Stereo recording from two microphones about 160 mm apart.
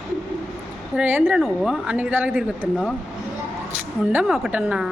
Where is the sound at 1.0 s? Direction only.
10° right (ahead or behind).